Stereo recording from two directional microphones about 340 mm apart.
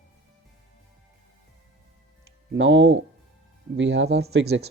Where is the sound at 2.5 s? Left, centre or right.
Right.